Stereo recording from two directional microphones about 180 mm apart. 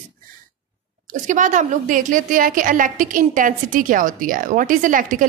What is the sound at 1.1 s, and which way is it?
A woman's voice, 45° right (ahead or behind).